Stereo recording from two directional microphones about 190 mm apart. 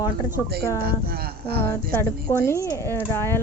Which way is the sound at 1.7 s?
15° left (ahead or behind).